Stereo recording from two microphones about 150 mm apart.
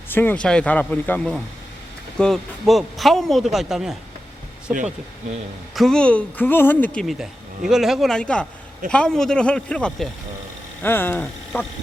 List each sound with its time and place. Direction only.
0.1 s speech: 10° left (ahead or behind); by 4.8 s 10° right (ahead or behind)
5.7 s speech: centre (ahead or behind)
7.0 s speech: centre (ahead or behind); by 11.7 s 15° left (ahead or behind)